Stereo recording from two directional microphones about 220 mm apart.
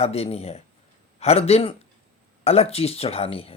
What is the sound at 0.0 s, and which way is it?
Speech, 25° left (ahead or behind).